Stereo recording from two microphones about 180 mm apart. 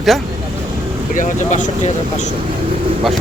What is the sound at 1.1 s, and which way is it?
Speech, 45° left (ahead or behind).